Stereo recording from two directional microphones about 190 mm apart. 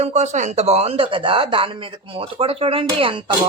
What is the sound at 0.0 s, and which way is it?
Speech, 40° right (ahead or behind).